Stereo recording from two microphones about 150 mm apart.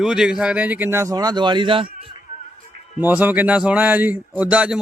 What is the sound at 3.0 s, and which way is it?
Speech, 10° right (ahead or behind).